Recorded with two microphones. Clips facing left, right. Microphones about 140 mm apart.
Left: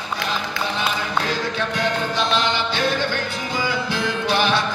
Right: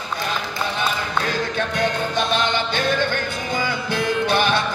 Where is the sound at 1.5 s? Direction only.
50° right (ahead or behind).